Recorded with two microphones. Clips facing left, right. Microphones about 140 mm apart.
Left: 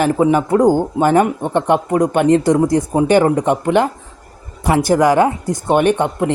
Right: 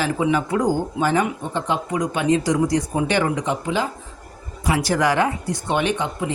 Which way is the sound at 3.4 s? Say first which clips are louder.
Left 8 dB; 60° left (ahead or behind).